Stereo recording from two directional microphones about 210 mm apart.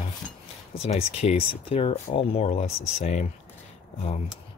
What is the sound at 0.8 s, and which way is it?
Speech, 30° left (ahead or behind).